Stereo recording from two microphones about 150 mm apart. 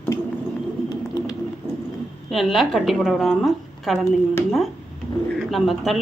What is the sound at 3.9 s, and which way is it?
Speech, 15° left (ahead or behind).